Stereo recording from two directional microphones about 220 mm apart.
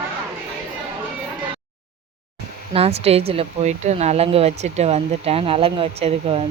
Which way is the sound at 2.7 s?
25° right (ahead or behind).